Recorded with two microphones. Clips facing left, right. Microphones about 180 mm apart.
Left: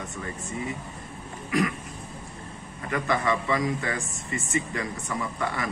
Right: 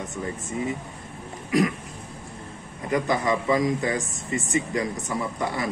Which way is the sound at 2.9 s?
20° right (ahead or behind).